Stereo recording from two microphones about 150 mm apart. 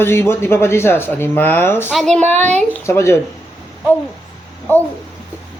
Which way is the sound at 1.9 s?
Centre (ahead or behind).